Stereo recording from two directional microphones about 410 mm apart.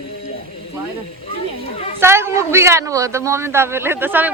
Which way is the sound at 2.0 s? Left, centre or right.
Centre.